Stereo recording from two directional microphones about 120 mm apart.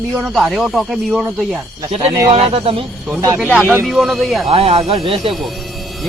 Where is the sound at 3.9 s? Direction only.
Centre (ahead or behind).